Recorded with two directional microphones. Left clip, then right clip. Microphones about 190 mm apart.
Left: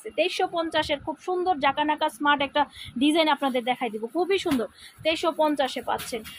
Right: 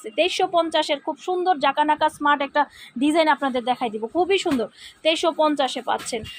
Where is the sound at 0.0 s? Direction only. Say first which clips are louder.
Right 4 dB; 20° right (ahead or behind).